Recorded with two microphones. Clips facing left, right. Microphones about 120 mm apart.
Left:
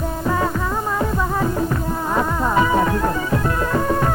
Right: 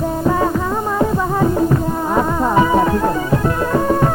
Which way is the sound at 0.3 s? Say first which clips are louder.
Right 4 dB; 30° right (ahead or behind).